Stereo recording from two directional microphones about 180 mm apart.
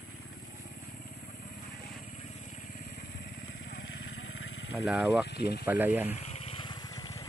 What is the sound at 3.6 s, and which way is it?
Vehicle, 65° left (ahead or behind).